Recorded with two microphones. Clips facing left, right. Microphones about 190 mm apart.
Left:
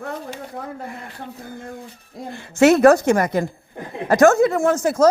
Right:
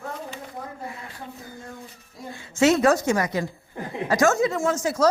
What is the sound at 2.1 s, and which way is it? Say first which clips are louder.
A woman's voice: left 5 dB; 65° left (ahead or behind).